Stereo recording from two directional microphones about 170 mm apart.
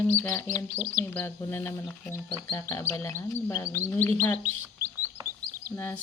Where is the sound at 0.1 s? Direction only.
15° left (ahead or behind).